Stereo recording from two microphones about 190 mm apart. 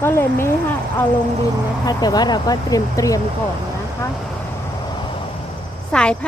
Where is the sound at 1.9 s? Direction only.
20° left (ahead or behind).